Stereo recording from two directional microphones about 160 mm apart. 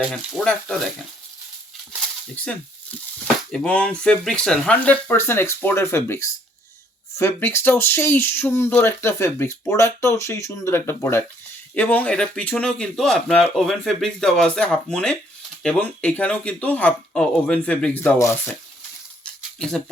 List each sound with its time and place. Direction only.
0.1 s speech: 5° left (ahead or behind)
2.3 s speech: 10° left (ahead or behind)
19.2 s a sound: 5° left (ahead or behind)